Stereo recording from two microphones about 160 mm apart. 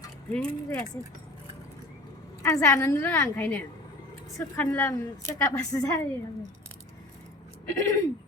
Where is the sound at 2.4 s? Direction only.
20° left (ahead or behind).